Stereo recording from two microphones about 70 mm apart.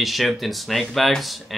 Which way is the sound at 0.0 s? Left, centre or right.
Centre.